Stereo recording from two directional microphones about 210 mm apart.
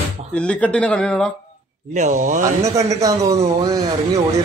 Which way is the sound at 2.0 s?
35° right (ahead or behind).